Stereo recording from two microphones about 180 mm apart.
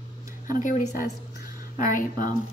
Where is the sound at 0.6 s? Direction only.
45° left (ahead or behind).